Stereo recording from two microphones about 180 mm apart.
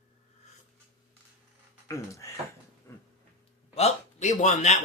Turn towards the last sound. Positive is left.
turn(degrees=40)  # may be behind; listen again after turning